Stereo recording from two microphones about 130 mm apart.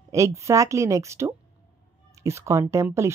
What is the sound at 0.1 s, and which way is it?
Speech, 25° right (ahead or behind).